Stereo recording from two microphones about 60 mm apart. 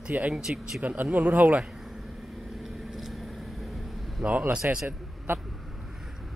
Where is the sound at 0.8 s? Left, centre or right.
Right.